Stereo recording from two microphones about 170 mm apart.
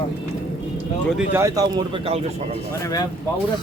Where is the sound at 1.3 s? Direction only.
15° right (ahead or behind); by 2.6 s 35° right (ahead or behind).